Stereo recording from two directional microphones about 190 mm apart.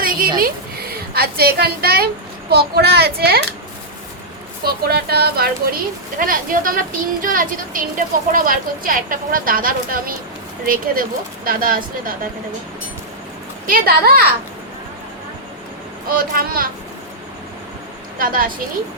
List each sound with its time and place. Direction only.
0.0 s a sound: 50° right (ahead or behind)
0.3 s a woman's voice: 50° right (ahead or behind)
4.6 s speech: 55° right (ahead or behind)
11.4 s speech: 50° right (ahead or behind)
13.7 s speech: 50° right (ahead or behind)
16.0 s speech: 50° right (ahead or behind)
18.2 s speech: 50° right (ahead or behind)